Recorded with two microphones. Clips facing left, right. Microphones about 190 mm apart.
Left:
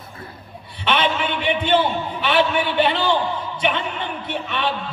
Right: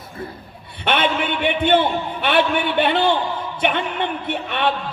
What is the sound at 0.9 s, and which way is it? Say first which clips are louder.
A man's voice: right 1 dB; 55° right (ahead or behind).